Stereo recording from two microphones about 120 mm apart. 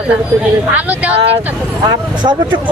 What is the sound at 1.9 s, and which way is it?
Speech, 40° right (ahead or behind).